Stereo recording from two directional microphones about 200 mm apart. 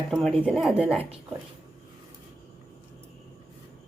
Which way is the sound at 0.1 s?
Centre (ahead or behind).